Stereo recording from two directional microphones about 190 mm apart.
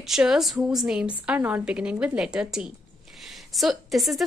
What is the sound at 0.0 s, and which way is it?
A woman's voice, centre (ahead or behind).